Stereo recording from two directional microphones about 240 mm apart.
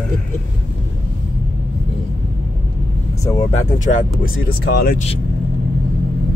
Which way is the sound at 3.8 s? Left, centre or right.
Left.